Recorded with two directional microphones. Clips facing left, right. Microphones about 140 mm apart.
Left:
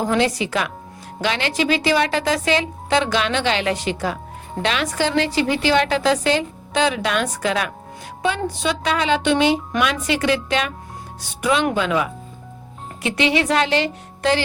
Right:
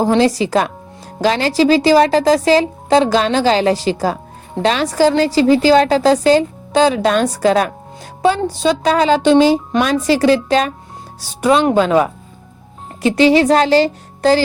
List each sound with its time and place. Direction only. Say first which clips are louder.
0.0 s a woman's voice: right 6 dB; 35° right (ahead or behind)